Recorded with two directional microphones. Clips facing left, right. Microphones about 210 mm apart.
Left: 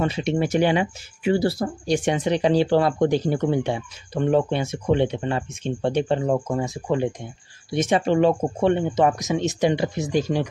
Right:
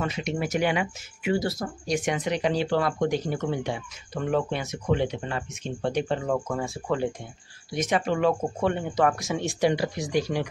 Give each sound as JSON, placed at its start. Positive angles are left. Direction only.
{"t": 0.0, "sound": "speech", "side_deg": 30}